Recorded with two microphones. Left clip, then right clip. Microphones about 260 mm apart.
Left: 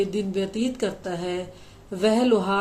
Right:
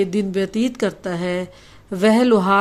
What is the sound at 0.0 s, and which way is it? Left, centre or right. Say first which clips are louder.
Speech: right 5 dB; right.